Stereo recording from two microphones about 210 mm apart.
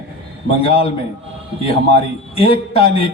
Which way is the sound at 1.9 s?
25° left (ahead or behind).